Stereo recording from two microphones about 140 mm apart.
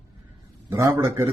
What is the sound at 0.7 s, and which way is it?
Speech, 20° right (ahead or behind).